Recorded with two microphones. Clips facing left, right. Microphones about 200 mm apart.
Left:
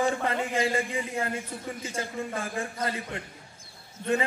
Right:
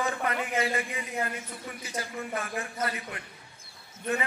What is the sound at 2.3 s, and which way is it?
Speech, 30° left (ahead or behind).